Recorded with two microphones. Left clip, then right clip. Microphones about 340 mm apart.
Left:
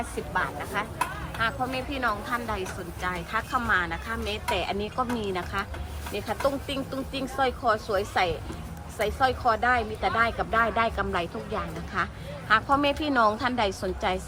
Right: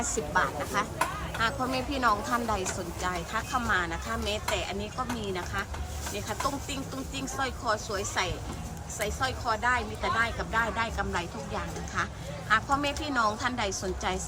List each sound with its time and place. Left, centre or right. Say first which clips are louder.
0.3 s speech: even; centre